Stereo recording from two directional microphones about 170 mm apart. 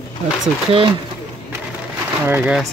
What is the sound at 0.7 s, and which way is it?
Speech, 35° right (ahead or behind).